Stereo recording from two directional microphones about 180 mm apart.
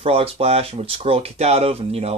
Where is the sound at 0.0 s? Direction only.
35° right (ahead or behind).